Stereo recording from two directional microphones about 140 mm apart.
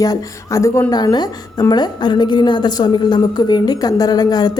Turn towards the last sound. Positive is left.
turn(degrees=30)  # may be behind; listen again after turning